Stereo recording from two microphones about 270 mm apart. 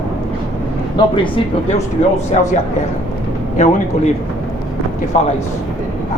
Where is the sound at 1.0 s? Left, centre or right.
Centre.